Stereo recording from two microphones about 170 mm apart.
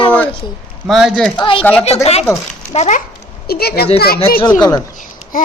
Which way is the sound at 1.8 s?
40° left (ahead or behind).